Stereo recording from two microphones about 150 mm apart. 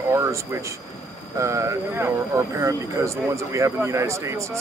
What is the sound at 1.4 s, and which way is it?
Speech, 20° right (ahead or behind).